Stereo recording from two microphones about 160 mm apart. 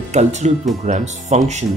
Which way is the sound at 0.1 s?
45° right (ahead or behind).